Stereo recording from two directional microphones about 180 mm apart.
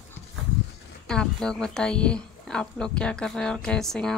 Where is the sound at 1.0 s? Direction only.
5° left (ahead or behind).